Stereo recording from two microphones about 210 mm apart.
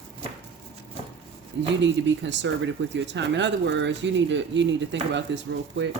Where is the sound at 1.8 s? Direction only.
60° right (ahead or behind).